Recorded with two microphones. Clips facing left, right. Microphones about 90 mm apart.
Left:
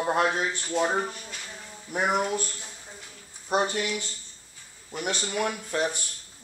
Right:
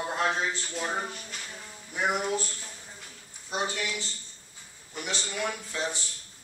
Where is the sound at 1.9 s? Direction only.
55° left (ahead or behind).